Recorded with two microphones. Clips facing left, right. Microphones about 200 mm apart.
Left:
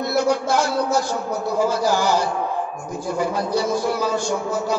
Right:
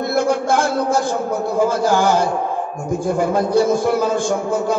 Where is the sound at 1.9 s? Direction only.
50° right (ahead or behind).